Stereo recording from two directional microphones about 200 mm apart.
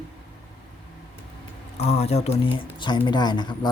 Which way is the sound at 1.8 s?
30° left (ahead or behind).